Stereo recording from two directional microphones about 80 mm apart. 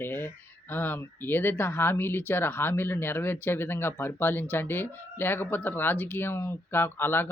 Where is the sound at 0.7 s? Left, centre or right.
Left.